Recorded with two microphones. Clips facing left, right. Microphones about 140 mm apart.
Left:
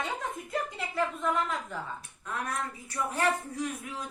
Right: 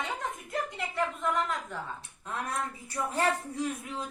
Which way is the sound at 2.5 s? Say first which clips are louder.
Right 1 dB; 25° right (ahead or behind).